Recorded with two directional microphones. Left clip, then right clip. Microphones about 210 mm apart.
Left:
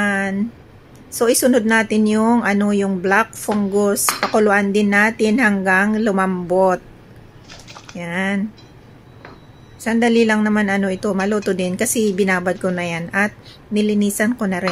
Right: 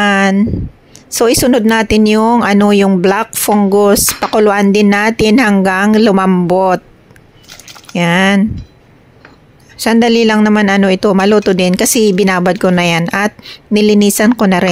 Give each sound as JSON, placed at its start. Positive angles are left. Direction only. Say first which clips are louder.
{"t": 0.0, "sound": "a sound", "louder": "right 9 dB", "side_deg": -40}
{"t": 1.1, "sound": "speech", "louder": "right 5 dB", "side_deg": -40}
{"t": 7.9, "sound": "speech", "louder": "right 12 dB", "side_deg": -45}
{"t": 9.8, "sound": "speech", "louder": "right 6 dB", "side_deg": -40}